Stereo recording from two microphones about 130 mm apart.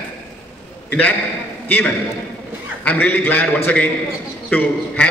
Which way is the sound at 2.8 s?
10° left (ahead or behind).